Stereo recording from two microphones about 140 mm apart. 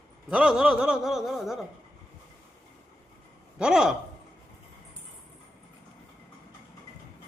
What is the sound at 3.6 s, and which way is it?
Speech, 5° right (ahead or behind).